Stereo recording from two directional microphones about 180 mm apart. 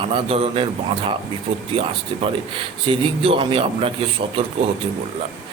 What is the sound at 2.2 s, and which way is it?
A man's voice, 30° right (ahead or behind).